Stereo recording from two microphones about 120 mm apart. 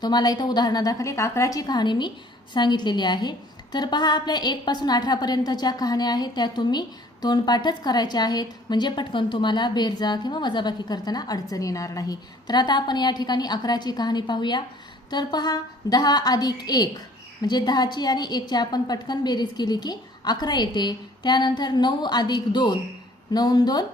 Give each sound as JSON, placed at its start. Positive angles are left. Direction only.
{"t": 0.0, "sound": "a woman's voice", "side_deg": 35}